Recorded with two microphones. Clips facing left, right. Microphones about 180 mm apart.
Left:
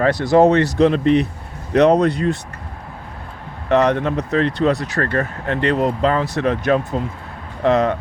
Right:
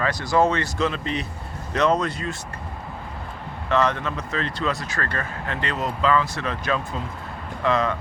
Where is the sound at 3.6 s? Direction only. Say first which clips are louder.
Left 6 dB; 65° left (ahead or behind).